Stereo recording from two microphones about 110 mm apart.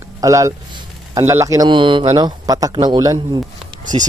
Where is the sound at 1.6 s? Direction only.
45° right (ahead or behind).